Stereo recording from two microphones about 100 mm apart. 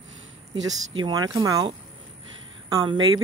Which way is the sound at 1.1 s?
40° right (ahead or behind).